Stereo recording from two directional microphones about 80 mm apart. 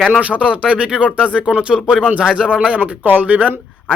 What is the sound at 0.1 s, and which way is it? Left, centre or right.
A man's voice, centre.